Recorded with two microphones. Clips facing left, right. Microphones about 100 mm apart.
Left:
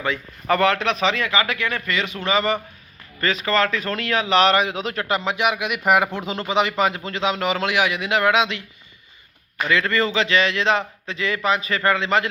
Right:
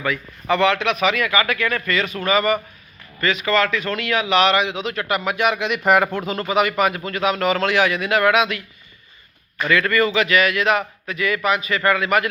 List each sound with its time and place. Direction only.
0.4 s a man's voice: 40° left (ahead or behind); by 2.6 s 25° left (ahead or behind)
3.2 s a man's voice: 35° left (ahead or behind)
5.5 s a man's voice: 10° left (ahead or behind)
9.6 s a man's voice: 25° left (ahead or behind)